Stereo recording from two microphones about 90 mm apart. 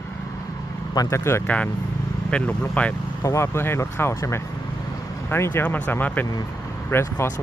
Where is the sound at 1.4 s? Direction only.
15° left (ahead or behind).